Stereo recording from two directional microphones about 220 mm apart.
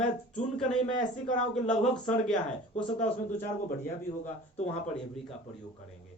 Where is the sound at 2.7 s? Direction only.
30° left (ahead or behind).